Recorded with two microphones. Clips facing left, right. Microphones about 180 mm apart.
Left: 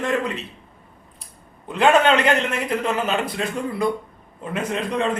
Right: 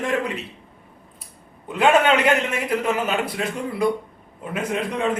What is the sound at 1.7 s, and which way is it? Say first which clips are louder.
A man's voice: left 1 dB; 5° right (ahead or behind).